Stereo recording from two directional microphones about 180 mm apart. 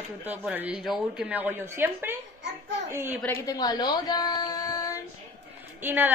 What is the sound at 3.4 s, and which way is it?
Speech, 20° left (ahead or behind).